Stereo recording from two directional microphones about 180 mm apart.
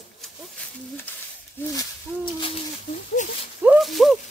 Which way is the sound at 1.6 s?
10° left (ahead or behind).